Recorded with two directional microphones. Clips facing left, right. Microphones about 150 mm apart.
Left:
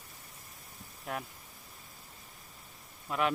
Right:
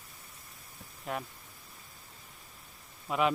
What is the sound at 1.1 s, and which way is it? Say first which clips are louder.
Speech: right 2 dB; centre (ahead or behind).